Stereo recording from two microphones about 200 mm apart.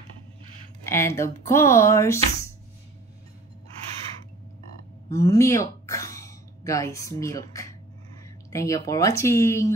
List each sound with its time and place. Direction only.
0.8 s speech: 10° left (ahead or behind)
5.1 s speech: 15° left (ahead or behind)